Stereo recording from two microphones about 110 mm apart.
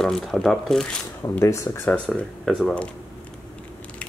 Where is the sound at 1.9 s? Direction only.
5° left (ahead or behind).